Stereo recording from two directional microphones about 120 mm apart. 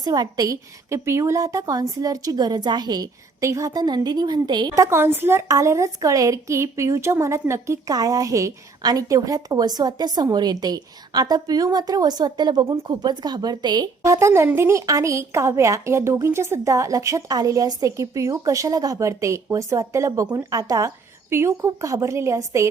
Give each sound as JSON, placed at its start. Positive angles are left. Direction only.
{"t": 0.0, "sound": "a woman's voice", "side_deg": -35}
{"t": 14.0, "sound": "a woman's voice", "side_deg": -25}